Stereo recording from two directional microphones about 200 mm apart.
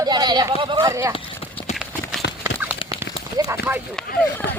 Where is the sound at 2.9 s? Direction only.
15° right (ahead or behind).